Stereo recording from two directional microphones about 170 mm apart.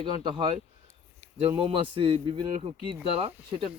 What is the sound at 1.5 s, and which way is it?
Speech, 30° right (ahead or behind).